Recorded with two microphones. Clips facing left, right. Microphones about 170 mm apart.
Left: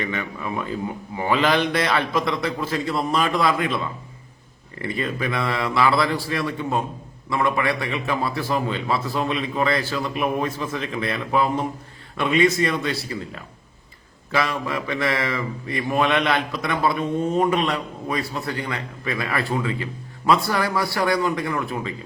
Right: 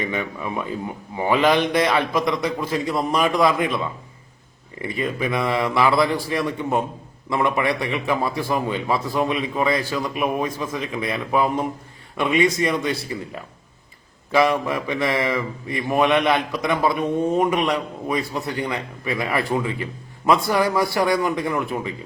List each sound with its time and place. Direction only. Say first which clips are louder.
0.0 s a man's voice: right 2 dB; 15° right (ahead or behind)
4.8 s a man's voice: right 1 dB; 15° right (ahead or behind)